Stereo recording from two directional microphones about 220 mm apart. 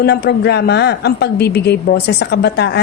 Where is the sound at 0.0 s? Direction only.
45° left (ahead or behind).